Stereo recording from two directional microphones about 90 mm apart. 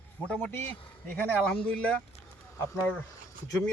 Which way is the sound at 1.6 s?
15° left (ahead or behind).